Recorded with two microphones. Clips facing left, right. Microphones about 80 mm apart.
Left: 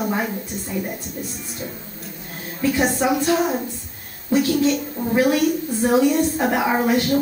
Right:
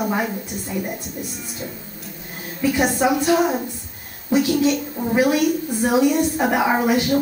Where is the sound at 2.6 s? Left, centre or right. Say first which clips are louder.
Right 1 dB; centre.